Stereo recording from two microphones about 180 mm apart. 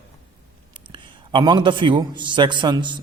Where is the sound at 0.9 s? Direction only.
25° right (ahead or behind).